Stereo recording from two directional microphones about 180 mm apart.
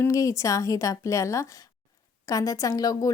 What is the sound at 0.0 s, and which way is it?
Speech, 15° left (ahead or behind).